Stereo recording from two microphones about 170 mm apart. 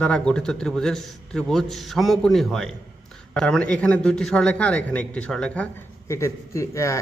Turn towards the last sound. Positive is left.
turn(degrees=15)  # may be behind; listen again after turning